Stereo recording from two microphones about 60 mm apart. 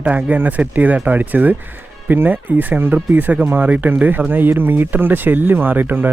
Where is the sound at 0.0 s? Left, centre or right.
Right.